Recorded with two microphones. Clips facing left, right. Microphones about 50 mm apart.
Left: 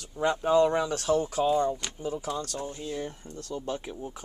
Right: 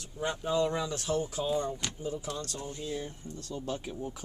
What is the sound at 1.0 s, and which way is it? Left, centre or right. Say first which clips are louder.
Speech: left 6 dB; left.